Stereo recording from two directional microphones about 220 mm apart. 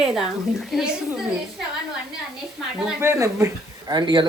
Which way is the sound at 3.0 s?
10° right (ahead or behind).